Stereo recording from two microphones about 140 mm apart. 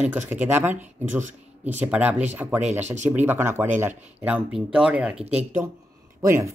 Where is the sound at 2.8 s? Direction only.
55° right (ahead or behind).